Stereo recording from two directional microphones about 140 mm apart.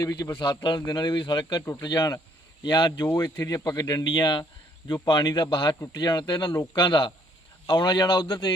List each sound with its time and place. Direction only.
0.0 s speech: 30° left (ahead or behind)